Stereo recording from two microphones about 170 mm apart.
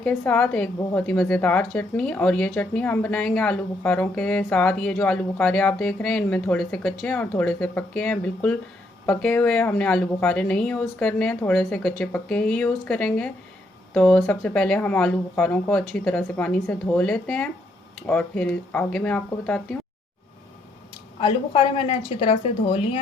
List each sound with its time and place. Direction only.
0.0 s speech: 5° left (ahead or behind)
21.2 s a woman's voice: 35° left (ahead or behind)